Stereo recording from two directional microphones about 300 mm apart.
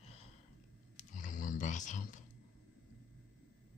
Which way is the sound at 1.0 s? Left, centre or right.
Left.